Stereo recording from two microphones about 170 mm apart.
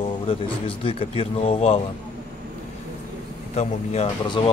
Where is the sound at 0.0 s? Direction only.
35° left (ahead or behind).